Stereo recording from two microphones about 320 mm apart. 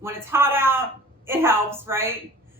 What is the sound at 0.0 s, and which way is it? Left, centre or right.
A woman's voice, centre.